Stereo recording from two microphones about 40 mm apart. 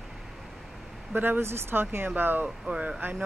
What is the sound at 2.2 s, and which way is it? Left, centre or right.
Speech, right.